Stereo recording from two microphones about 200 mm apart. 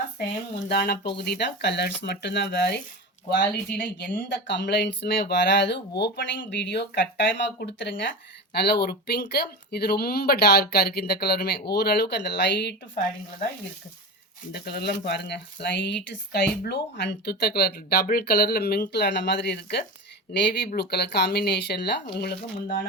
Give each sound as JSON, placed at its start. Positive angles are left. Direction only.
{"t": 0.7, "sound": "speech", "side_deg": 55}
{"t": 14.5, "sound": "speech", "side_deg": 55}
{"t": 22.6, "sound": "speech", "side_deg": 45}